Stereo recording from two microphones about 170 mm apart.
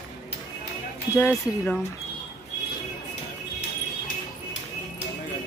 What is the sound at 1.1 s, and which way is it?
Speech, 15° left (ahead or behind).